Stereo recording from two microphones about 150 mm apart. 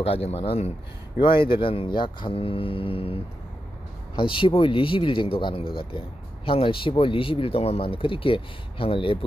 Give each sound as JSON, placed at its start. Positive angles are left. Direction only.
{"t": 0.0, "sound": "a man's voice", "side_deg": 40}